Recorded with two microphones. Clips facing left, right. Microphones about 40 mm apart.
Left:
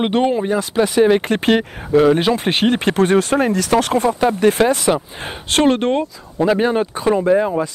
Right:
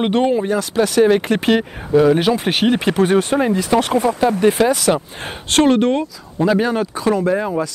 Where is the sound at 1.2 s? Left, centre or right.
Left.